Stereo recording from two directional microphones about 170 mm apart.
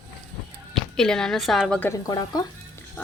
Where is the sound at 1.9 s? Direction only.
20° left (ahead or behind).